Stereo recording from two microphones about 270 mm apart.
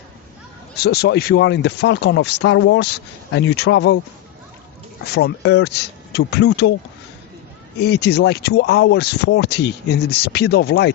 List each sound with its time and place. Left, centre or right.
0.8 s speech: left
5.1 s speech: left
7.8 s speech: left